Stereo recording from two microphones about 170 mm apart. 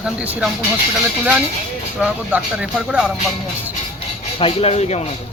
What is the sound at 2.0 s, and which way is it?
Speech, 5° right (ahead or behind).